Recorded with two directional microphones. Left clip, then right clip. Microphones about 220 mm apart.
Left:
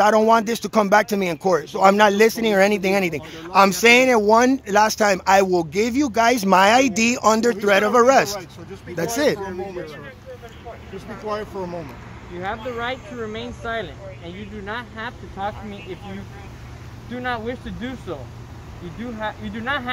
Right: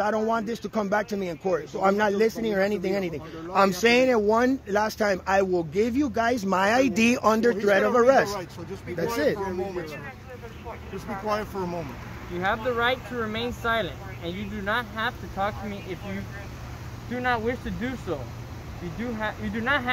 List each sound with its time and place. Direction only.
0.0 s speech: 30° left (ahead or behind)
6.6 s speech: 15° left (ahead or behind)
11.2 s speech: 15° right (ahead or behind)
12.4 s speech: 45° right (ahead or behind); by 15.5 s 30° right (ahead or behind)
17.1 s speech: 5° right (ahead or behind)
19.1 s speech: 5° right (ahead or behind)